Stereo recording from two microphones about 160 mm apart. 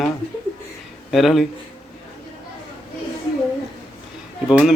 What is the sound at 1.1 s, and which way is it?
Speech, centre (ahead or behind).